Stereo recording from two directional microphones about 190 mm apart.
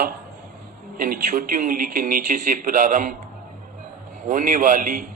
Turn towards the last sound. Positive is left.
turn(degrees=-45)  # may be behind; listen again after turning